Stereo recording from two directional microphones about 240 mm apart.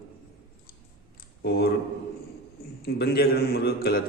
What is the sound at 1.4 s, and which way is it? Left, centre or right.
Speech, left.